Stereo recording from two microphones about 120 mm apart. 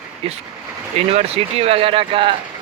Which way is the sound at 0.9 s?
55° right (ahead or behind).